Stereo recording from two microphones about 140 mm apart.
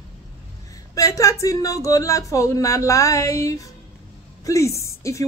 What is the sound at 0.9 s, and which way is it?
Speech, 25° left (ahead or behind).